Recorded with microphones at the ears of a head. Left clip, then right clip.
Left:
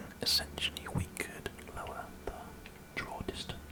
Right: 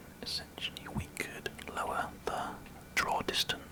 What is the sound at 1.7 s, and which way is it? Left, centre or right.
Whispering, right.